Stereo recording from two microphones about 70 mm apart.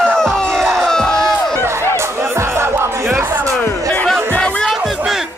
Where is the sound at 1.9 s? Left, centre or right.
Right.